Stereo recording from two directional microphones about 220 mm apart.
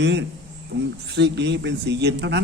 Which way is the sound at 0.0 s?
55° right (ahead or behind).